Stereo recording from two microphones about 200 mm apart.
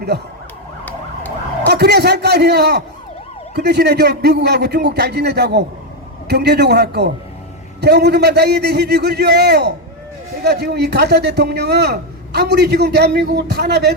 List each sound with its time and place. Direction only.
1.6 s a man's voice: 55° right (ahead or behind)